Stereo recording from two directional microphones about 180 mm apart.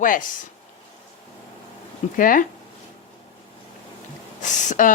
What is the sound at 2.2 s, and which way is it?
Speech, 50° left (ahead or behind).